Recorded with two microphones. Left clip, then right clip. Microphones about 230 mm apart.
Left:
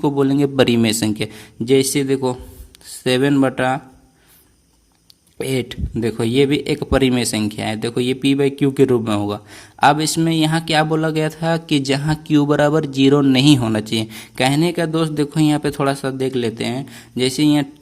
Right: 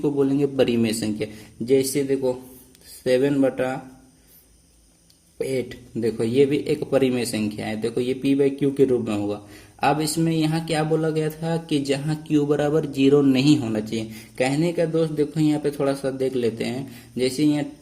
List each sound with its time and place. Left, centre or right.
0.0 s speech: left
5.4 s speech: left